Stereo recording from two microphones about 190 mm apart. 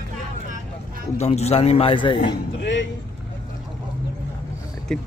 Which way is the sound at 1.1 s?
35° left (ahead or behind).